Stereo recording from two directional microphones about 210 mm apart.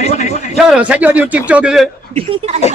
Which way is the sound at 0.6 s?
5° right (ahead or behind).